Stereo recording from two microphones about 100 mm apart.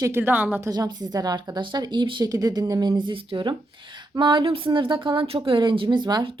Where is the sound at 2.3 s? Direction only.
40° right (ahead or behind).